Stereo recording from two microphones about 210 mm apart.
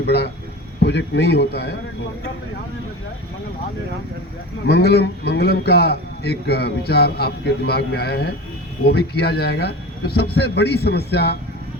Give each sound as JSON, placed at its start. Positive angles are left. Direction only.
{"t": 0.0, "sound": "a man's voice", "side_deg": 50}
{"t": 4.6, "sound": "a man's voice", "side_deg": 50}